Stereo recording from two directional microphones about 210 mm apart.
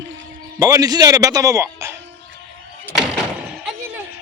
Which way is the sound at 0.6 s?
15° right (ahead or behind).